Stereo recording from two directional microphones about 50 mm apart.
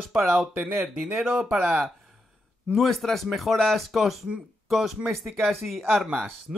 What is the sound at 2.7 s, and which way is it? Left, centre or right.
Speech, centre.